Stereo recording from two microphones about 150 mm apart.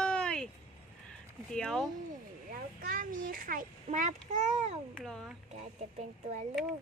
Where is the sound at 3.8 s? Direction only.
60° right (ahead or behind).